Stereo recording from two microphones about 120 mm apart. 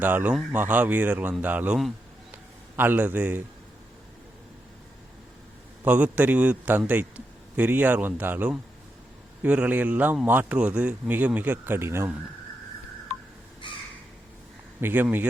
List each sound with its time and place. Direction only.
0.0 s speech: 15° right (ahead or behind)
5.8 s speech: 15° right (ahead or behind)
13.6 s crow: 40° left (ahead or behind)
14.8 s speech: 20° right (ahead or behind)